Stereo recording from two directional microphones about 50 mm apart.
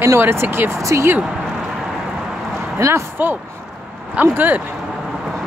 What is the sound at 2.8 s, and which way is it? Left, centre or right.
Speech, right.